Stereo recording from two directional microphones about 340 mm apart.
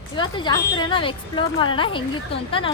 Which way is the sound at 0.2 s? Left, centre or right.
Centre.